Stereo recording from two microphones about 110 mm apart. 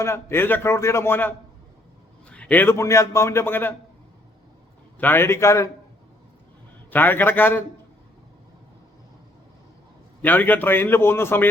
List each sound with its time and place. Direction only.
0.0 s a man's voice: 25° left (ahead or behind)
2.3 s a man's voice: 15° left (ahead or behind)
4.9 s a man's voice: 20° left (ahead or behind)
6.9 s a man's voice: 15° left (ahead or behind)
10.2 s a man's voice: 15° left (ahead or behind)